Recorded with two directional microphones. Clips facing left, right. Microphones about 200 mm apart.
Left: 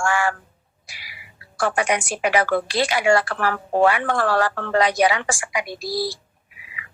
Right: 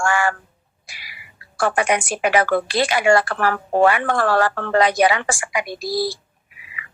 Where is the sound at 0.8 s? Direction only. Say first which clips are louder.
Right 1 dB; 50° right (ahead or behind).